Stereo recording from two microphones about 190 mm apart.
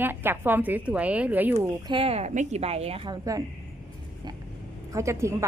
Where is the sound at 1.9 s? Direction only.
30° right (ahead or behind).